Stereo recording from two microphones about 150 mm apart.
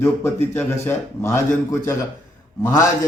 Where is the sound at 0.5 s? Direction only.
15° left (ahead or behind).